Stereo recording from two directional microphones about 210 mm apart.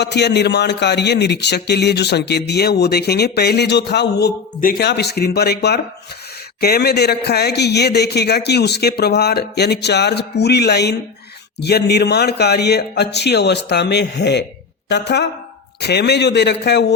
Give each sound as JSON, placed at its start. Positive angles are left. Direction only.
{"t": 0.0, "sound": "a woman's voice", "side_deg": 55}